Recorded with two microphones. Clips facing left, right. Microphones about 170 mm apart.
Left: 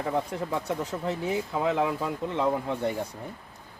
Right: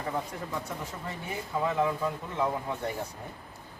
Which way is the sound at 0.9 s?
80° left.